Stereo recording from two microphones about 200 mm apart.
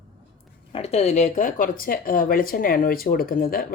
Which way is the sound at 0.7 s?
30° left (ahead or behind).